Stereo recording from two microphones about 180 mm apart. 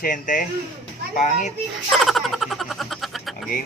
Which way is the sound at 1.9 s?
Centre (ahead or behind).